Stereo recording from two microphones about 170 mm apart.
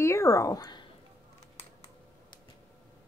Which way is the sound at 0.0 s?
15° left (ahead or behind).